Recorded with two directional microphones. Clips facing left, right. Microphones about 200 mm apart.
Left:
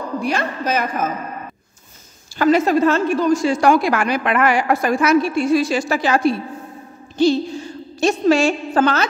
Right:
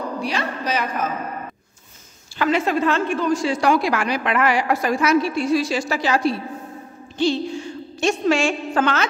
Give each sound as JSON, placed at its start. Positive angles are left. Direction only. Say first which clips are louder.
{"t": 0.2, "sound": "a woman's voice", "louder": "left 3 dB", "side_deg": 50}
{"t": 2.3, "sound": "a woman's voice", "louder": "left 5 dB", "side_deg": 40}
{"t": 7.2, "sound": "a woman's voice", "louder": "left 4 dB", "side_deg": 40}